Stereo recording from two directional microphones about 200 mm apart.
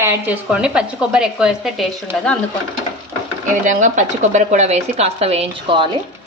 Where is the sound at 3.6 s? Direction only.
40° right (ahead or behind).